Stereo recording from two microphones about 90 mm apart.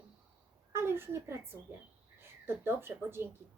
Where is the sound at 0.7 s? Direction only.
25° right (ahead or behind).